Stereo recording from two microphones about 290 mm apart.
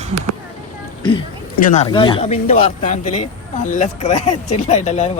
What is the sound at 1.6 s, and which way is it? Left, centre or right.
Speech, left.